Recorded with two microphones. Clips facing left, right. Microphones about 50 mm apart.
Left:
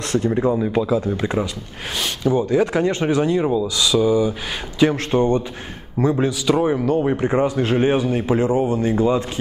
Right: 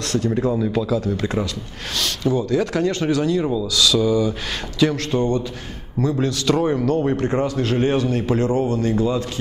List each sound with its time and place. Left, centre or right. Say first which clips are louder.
0.1 s speech: left 2 dB; left
6.2 s speech: left 1 dB; centre